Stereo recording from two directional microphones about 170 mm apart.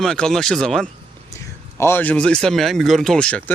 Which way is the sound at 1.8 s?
10° left (ahead or behind).